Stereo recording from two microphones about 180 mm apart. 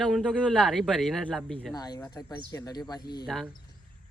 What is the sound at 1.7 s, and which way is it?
Speech, 20° left (ahead or behind).